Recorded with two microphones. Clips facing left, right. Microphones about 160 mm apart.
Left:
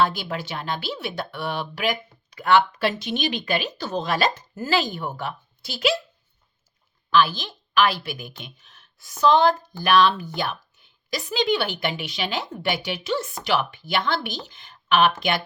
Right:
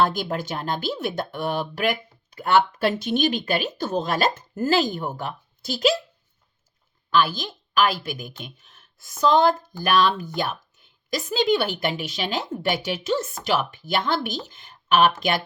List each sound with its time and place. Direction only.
0.0 s speech: 50° right (ahead or behind)
7.1 s a woman's voice: 45° right (ahead or behind)